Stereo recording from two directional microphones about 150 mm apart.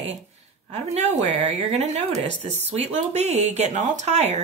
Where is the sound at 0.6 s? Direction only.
45° right (ahead or behind).